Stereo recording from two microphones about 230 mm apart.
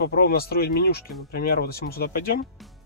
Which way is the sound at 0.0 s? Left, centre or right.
Left.